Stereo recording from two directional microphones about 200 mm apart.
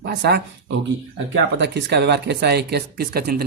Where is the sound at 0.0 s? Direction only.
55° right (ahead or behind).